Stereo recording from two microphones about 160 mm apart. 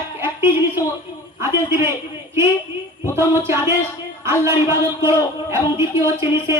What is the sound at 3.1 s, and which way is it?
Speech, 15° right (ahead or behind).